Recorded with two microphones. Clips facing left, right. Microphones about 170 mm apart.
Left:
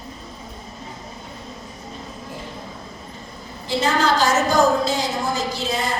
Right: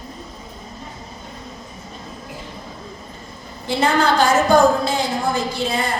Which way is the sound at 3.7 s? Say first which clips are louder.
Right 2 dB; 60° right (ahead or behind).